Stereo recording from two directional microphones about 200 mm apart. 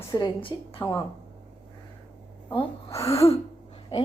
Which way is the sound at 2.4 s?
15° left (ahead or behind).